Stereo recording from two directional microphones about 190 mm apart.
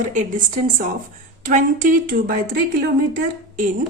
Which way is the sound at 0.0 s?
40° right (ahead or behind).